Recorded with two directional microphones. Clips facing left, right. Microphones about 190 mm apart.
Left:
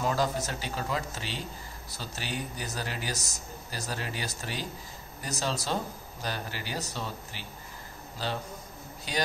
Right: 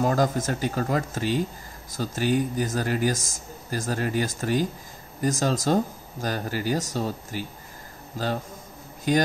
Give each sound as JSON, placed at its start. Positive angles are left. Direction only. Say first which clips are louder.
{"t": 0.0, "sound": "speech", "louder": "right 6 dB", "side_deg": -50}
{"t": 9.1, "sound": "speech", "louder": "right 11 dB", "side_deg": -50}